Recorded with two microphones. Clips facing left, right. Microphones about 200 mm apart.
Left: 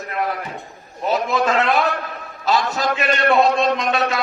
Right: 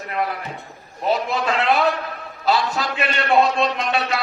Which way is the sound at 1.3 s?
45° left (ahead or behind).